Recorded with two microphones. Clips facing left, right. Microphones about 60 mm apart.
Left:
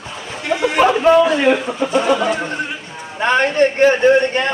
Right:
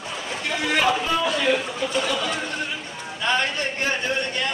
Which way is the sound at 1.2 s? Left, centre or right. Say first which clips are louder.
Left 8 dB; left.